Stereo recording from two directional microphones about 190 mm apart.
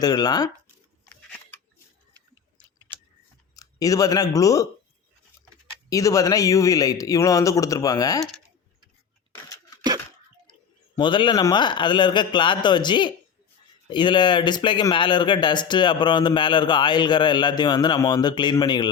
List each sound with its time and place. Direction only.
0.0 s speech: 20° left (ahead or behind)
3.5 s speech: 20° left (ahead or behind)
5.9 s speech: 15° left (ahead or behind)
9.3 s a sound: 20° left (ahead or behind)
10.9 s speech: 25° left (ahead or behind)